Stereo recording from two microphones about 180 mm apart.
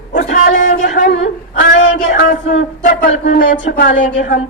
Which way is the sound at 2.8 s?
50° left (ahead or behind).